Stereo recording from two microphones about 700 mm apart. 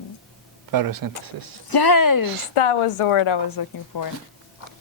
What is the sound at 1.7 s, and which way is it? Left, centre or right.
Speech, left.